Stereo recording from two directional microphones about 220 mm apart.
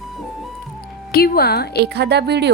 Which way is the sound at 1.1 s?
45° left (ahead or behind).